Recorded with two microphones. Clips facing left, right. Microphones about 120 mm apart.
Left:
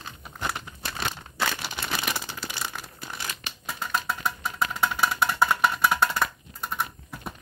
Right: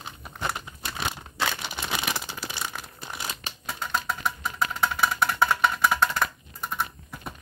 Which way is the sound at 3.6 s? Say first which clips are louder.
Even; centre (ahead or behind).